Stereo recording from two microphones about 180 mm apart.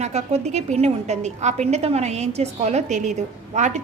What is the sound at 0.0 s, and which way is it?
A woman's voice, 35° right (ahead or behind).